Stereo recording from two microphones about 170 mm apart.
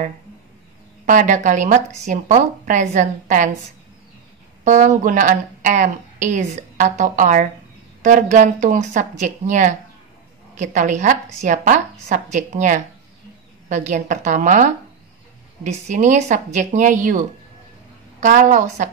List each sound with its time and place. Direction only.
1.0 s speech: 45° right (ahead or behind)
4.6 s speech: 45° right (ahead or behind)
18.2 s speech: 50° right (ahead or behind)